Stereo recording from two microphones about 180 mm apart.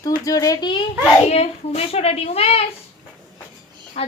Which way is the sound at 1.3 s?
35° left (ahead or behind).